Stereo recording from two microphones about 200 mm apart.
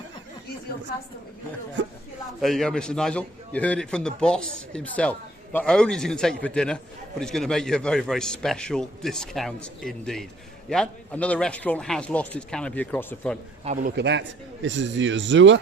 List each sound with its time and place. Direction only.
2.4 s a man's voice: centre (ahead or behind)
13.9 s speech: 60° right (ahead or behind)